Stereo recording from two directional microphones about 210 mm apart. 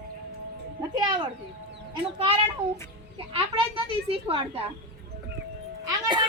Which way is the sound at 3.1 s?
25° right (ahead or behind).